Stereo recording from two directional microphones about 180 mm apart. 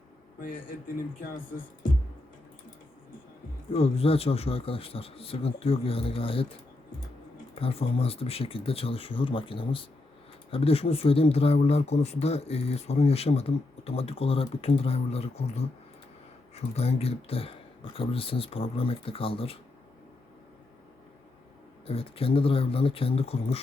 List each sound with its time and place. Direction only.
3.7 s speech: 35° left (ahead or behind)
7.6 s speech: 35° left (ahead or behind)
21.8 s speech: 30° left (ahead or behind)